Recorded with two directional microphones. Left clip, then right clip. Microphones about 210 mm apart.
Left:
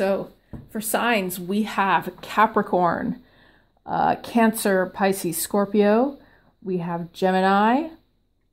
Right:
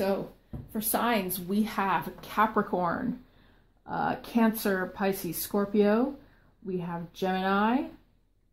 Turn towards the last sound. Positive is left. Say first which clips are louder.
# left 8 dB
turn(degrees=45)  # may be behind; listen again after turning